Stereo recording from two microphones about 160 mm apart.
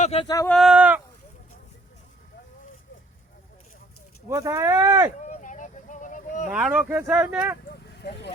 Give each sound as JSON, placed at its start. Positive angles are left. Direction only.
{"t": 0.0, "sound": "speech", "side_deg": 40}
{"t": 0.4, "sound": "speech", "side_deg": 0}
{"t": 4.3, "sound": "speech", "side_deg": -20}
{"t": 5.2, "sound": "vehicle", "side_deg": 50}
{"t": 6.5, "sound": "speech", "side_deg": -5}
{"t": 7.7, "sound": "a sound", "side_deg": 90}